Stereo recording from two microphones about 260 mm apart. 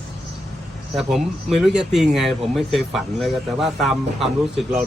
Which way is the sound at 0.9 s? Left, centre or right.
Centre.